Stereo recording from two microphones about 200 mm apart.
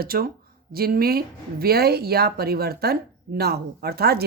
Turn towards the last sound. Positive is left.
turn(degrees=-50)  # may be behind; listen again after turning